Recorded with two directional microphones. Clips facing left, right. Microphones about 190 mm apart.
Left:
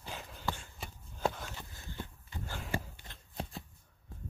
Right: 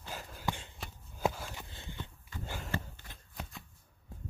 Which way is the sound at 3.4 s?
35° left (ahead or behind).